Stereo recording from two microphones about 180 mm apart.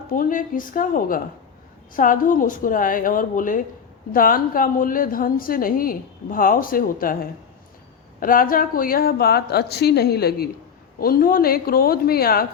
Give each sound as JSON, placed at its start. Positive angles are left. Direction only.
{"t": 0.1, "sound": "a woman's voice", "side_deg": 50}